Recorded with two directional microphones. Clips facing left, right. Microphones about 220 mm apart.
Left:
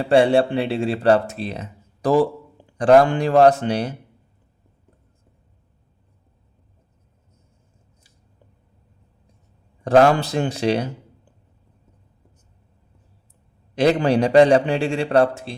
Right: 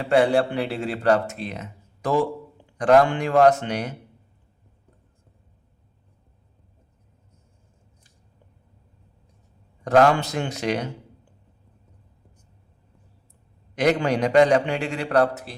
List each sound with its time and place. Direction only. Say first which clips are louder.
0.0 s speech: left 3 dB; 30° left (ahead or behind)
9.8 s speech: left 3 dB; 30° left (ahead or behind)
13.7 s speech: left 4 dB; 30° left (ahead or behind)